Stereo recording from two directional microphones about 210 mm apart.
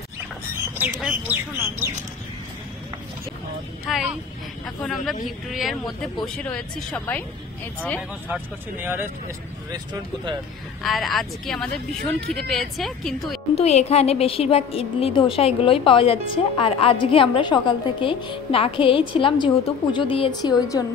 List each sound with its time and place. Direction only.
0.7 s speech: 5° right (ahead or behind)
3.9 s a woman's voice: centre (ahead or behind)
8.8 s speech: 10° right (ahead or behind)
10.8 s a woman's voice: centre (ahead or behind)
13.6 s a woman's voice: 30° left (ahead or behind)